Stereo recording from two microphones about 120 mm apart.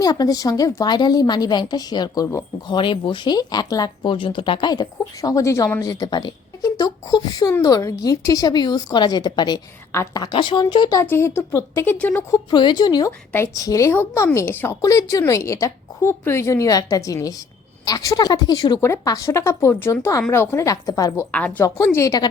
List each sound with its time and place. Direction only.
0.0 s speech: 30° left (ahead or behind)
5.8 s speech: 35° left (ahead or behind)
9.9 s speech: 25° left (ahead or behind)
10.3 s speech: 40° left (ahead or behind)
10.9 s speech: 20° left (ahead or behind)
12.5 s speech: 40° left (ahead or behind)
13.1 s speech: 20° left (ahead or behind)
18.8 s speech: 25° left (ahead or behind)
21.9 s speech: 30° left (ahead or behind)